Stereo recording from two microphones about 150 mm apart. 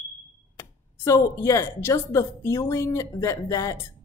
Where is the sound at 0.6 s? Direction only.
20° left (ahead or behind).